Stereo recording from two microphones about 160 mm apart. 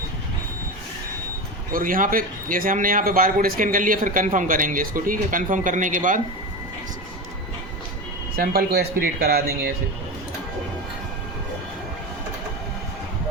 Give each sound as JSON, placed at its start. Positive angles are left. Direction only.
{"t": 1.7, "sound": "a man's voice", "side_deg": -60}
{"t": 8.4, "sound": "speech", "side_deg": -70}